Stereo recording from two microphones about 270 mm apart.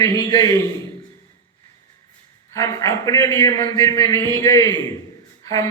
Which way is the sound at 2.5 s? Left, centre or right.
Centre.